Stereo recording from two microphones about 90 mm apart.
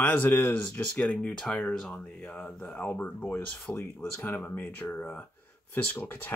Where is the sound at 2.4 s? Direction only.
15° left (ahead or behind).